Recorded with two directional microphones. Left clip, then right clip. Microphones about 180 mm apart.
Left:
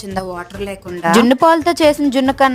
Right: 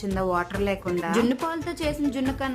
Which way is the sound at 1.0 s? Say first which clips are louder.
Left 14 dB; 45° left (ahead or behind).